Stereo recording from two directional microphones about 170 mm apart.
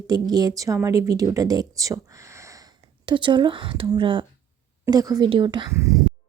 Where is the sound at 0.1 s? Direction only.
25° right (ahead or behind).